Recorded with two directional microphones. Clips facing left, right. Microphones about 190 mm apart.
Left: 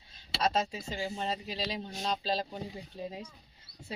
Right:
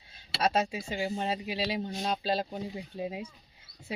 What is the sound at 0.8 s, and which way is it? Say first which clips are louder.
Speech: right 4 dB; 10° right (ahead or behind).